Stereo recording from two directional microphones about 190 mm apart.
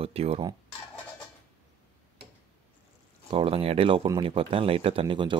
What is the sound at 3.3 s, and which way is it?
Speech, 30° right (ahead or behind).